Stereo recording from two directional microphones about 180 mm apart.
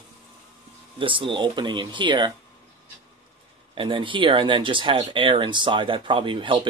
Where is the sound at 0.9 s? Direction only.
30° right (ahead or behind).